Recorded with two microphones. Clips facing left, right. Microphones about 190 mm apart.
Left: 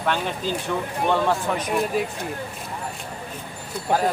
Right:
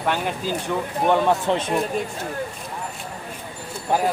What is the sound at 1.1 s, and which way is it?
Speech, 20° right (ahead or behind).